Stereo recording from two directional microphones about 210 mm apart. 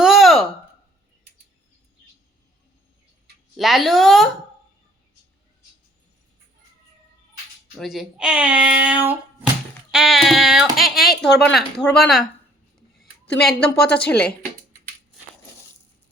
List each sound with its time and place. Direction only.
0.0 s a sound: centre (ahead or behind)
3.6 s speech: centre (ahead or behind)
7.8 s speech: centre (ahead or behind)
11.3 s a woman's voice: 55° left (ahead or behind)
11.5 s speech: centre (ahead or behind)
13.2 s a woman's voice: 55° left (ahead or behind)